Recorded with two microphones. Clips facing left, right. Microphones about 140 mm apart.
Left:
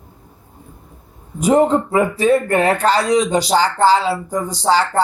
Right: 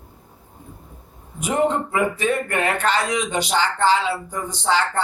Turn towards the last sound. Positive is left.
turn(degrees=35)  # may be behind; listen again after turning